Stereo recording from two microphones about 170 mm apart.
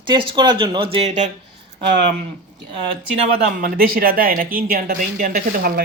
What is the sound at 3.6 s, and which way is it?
Speech, 55° right (ahead or behind).